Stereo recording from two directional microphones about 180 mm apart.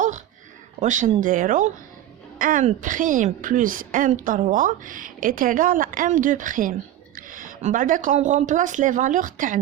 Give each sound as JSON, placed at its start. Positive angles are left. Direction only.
{"t": 0.8, "sound": "a woman's voice", "side_deg": -45}